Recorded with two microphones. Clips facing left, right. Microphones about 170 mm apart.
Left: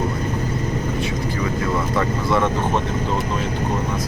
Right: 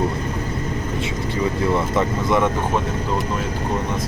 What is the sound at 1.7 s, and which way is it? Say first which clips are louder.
Speech: right 1 dB; 20° right (ahead or behind).